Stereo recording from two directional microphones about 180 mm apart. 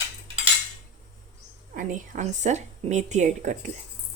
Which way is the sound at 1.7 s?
45° right (ahead or behind).